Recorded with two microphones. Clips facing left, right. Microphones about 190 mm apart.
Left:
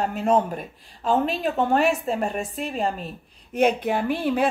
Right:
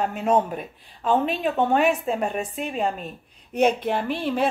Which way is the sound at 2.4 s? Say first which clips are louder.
Even; 35° left (ahead or behind).